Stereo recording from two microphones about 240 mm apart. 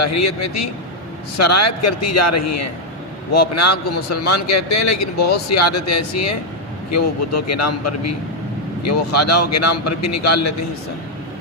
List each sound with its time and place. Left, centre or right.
0.0 s speech: left